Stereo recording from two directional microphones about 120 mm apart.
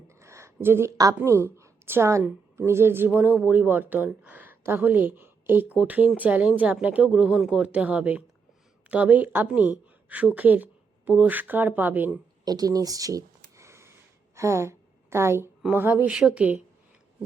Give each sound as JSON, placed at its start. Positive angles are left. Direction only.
{"t": 0.1, "sound": "a woman's voice", "side_deg": -25}
{"t": 12.5, "sound": "a sound", "side_deg": -30}
{"t": 14.3, "sound": "a woman's voice", "side_deg": -25}